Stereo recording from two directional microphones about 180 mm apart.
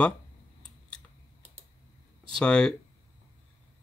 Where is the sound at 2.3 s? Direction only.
5° left (ahead or behind).